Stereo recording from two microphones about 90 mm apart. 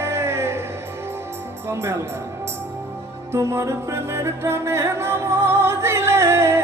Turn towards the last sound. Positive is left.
turn(degrees=-30)  # may be behind; listen again after turning